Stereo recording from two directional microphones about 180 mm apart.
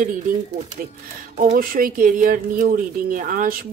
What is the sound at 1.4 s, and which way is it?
Speech, 45° right (ahead or behind).